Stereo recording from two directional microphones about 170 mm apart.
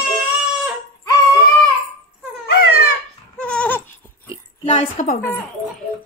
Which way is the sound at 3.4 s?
5° left (ahead or behind).